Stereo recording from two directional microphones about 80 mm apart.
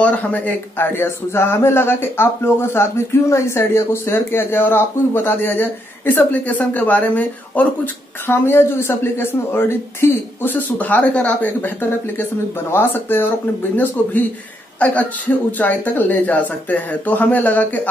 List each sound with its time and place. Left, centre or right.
0.0 s a man's voice: centre
14.8 s a man's voice: centre